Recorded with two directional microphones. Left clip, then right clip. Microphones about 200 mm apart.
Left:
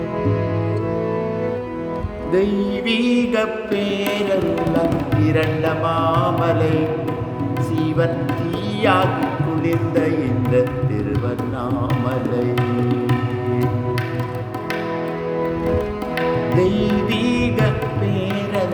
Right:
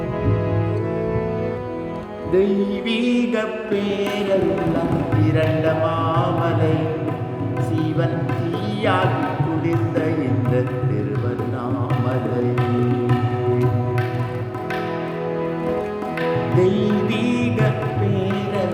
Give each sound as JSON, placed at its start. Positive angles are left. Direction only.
{"t": 2.3, "sound": "music", "side_deg": 20}
{"t": 7.8, "sound": "music", "side_deg": 25}
{"t": 16.6, "sound": "music", "side_deg": 20}